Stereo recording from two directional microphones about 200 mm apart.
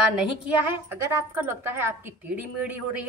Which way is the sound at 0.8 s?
10° right (ahead or behind).